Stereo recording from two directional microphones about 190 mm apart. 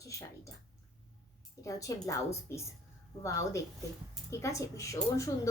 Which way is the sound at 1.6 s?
15° left (ahead or behind).